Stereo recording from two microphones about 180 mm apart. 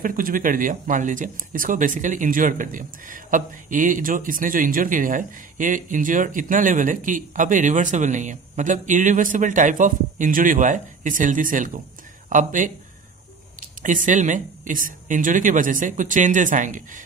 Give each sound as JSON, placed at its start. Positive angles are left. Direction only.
{"t": 0.0, "sound": "speech", "side_deg": -50}